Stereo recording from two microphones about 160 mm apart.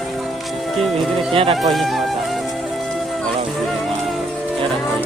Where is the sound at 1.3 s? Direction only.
35° right (ahead or behind).